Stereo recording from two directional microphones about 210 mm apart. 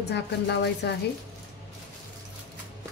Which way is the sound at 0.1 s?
55° left (ahead or behind).